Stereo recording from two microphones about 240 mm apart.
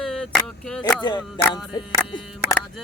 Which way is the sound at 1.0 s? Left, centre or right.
Centre.